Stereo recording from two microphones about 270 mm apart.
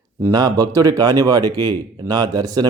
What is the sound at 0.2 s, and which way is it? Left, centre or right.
Speech, centre.